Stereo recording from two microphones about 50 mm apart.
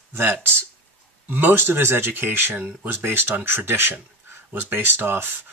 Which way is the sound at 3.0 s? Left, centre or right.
Right.